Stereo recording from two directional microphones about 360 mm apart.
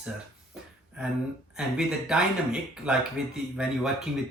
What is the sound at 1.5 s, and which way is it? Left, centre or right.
Speech, centre.